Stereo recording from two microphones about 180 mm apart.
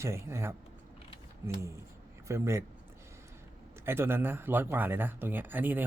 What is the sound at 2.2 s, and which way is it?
Speech, 15° right (ahead or behind).